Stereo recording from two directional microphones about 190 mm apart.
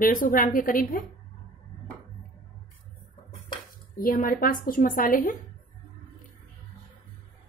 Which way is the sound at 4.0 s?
50° left (ahead or behind).